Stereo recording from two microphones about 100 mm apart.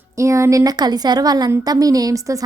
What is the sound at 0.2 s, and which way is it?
A woman's voice, 30° right (ahead or behind).